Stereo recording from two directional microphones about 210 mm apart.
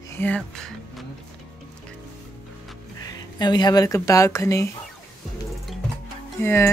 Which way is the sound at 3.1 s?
20° left (ahead or behind).